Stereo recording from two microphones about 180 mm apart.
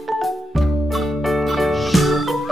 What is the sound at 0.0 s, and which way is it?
Music, centre (ahead or behind).